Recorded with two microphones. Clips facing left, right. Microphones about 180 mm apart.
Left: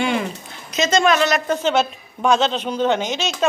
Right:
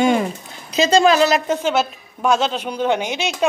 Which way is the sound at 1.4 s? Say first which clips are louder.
Even; 10° right (ahead or behind).